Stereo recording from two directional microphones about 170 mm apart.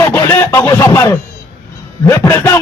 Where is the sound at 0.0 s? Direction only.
15° left (ahead or behind).